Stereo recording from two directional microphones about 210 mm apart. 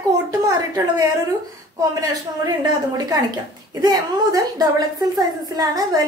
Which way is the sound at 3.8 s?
20° right (ahead or behind).